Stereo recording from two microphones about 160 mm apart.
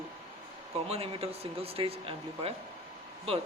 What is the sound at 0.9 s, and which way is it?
Speech, 40° right (ahead or behind).